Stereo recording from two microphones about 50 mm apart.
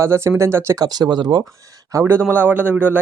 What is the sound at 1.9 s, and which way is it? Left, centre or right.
Speech, right.